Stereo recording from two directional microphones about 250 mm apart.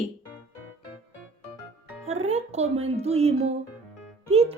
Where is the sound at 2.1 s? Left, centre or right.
Right.